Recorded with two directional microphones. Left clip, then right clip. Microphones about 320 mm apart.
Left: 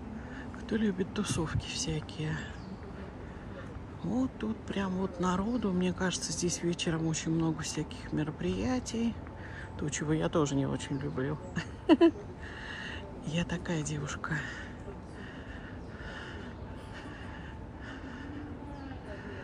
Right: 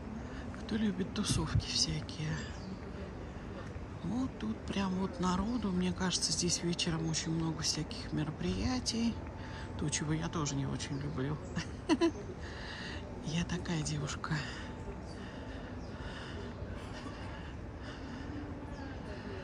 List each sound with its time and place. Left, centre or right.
0.7 s speech: centre
4.0 s speech: centre